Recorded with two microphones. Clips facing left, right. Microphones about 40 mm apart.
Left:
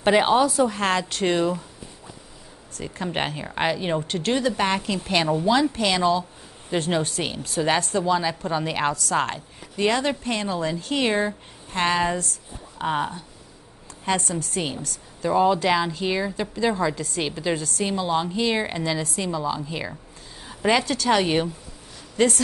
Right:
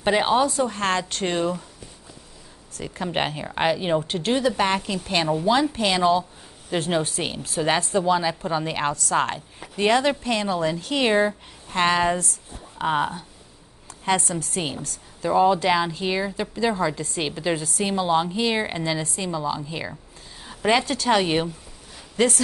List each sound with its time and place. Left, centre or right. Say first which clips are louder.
0.0 s a woman's voice: left 2 dB; centre
2.8 s a woman's voice: right 1 dB; centre
4.3 s a woman's voice: right 1 dB; centre
4.6 s a woman's voice: right 1 dB; centre
6.7 s a woman's voice: even; centre
9.6 s speech: right 2 dB; centre
10.2 s a woman's voice: right 2 dB; centre